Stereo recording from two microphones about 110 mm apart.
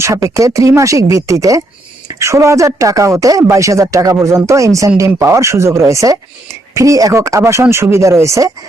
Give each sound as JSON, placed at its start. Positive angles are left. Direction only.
{"t": 0.0, "sound": "speech", "side_deg": -30}